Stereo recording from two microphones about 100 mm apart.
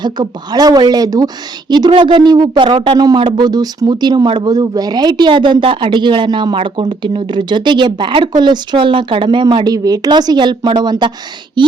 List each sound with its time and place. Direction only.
0.0 s speech: 45° right (ahead or behind)
9.7 s speech: 40° right (ahead or behind)